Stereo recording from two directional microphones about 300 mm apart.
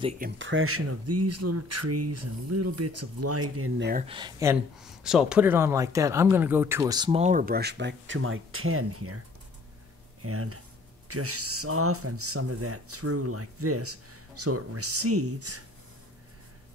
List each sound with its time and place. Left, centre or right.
0.2 s speech: right
4.1 s speech: centre; by 9.2 s right
10.2 s speech: right